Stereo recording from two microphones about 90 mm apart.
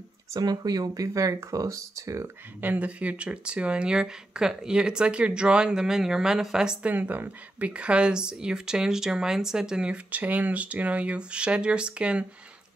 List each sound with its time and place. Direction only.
0.3 s speech: 45° right (ahead or behind)
2.6 s speech: 15° right (ahead or behind)